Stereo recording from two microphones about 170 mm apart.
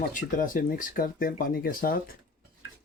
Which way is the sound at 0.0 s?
55° left (ahead or behind).